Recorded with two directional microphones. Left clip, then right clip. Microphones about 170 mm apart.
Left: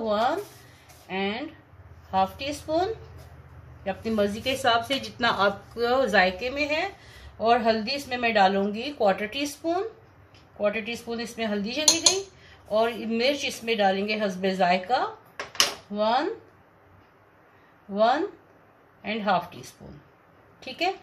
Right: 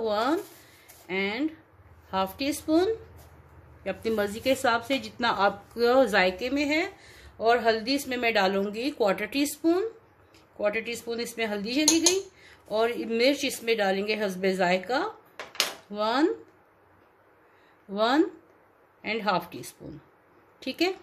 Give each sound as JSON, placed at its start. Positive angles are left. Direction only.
{"t": 1.0, "sound": "a woman's voice", "side_deg": -75}
{"t": 4.8, "sound": "a woman's voice", "side_deg": -35}
{"t": 5.8, "sound": "a woman's voice", "side_deg": -50}
{"t": 17.9, "sound": "a woman's voice", "side_deg": -75}
{"t": 20.6, "sound": "a woman's voice", "side_deg": -75}